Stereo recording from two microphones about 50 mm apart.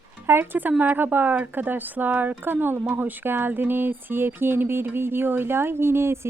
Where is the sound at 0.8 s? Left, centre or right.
Right.